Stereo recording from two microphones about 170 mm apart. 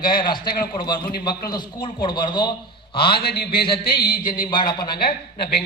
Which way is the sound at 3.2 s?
65° left (ahead or behind).